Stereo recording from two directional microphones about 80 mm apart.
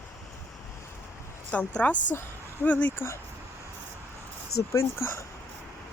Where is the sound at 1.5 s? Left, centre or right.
Centre.